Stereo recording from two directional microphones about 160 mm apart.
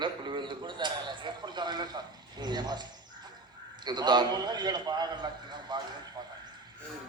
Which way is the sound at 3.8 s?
25° right (ahead or behind).